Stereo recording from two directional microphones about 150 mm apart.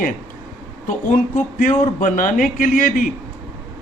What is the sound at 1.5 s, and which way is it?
A man's voice, 65° left (ahead or behind).